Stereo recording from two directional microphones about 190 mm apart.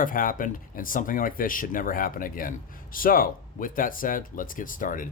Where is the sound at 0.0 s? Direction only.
45° left (ahead or behind).